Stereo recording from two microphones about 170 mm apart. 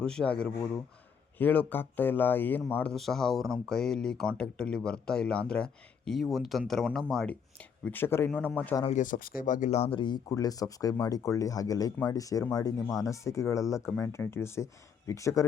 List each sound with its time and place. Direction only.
0.0 s speech: 5° left (ahead or behind)
8.9 s speech: 50° left (ahead or behind); by 15.4 s 20° left (ahead or behind)